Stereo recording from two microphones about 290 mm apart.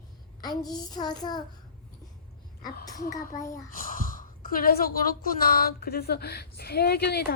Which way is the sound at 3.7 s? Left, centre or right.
Left.